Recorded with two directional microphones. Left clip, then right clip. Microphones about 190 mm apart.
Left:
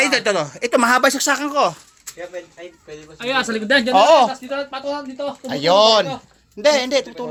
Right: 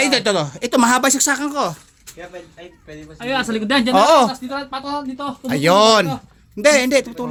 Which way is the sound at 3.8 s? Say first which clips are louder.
Even; 30° right (ahead or behind).